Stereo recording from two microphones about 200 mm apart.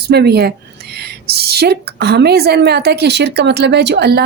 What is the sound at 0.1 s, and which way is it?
A woman's voice, 55° right (ahead or behind).